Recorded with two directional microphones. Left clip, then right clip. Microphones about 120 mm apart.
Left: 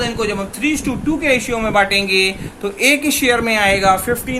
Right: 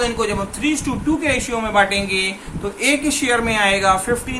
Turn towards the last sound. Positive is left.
turn(degrees=45)  # may be behind; listen again after turning